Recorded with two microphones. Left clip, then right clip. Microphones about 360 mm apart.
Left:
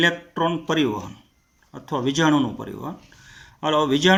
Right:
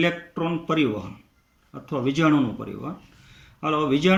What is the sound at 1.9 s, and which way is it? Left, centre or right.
Speech, centre.